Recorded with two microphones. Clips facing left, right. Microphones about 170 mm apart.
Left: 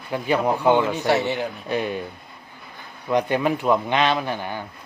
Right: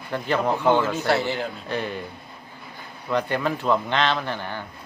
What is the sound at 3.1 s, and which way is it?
Speech, 15° left (ahead or behind).